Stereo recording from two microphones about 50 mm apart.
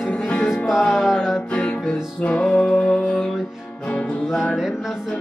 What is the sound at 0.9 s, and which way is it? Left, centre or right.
Music, centre.